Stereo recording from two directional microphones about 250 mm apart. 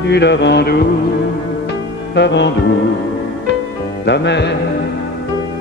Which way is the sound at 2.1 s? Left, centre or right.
Left.